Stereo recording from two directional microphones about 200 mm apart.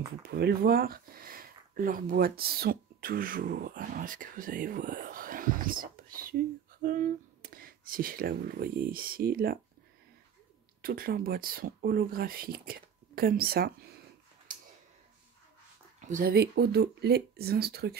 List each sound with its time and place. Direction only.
0.4 s speech: 50° right (ahead or behind)
10.8 s speech: 45° right (ahead or behind)
16.1 s speech: 45° right (ahead or behind)